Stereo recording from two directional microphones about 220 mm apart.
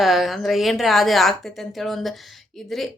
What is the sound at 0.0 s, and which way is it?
A woman's voice, centre (ahead or behind).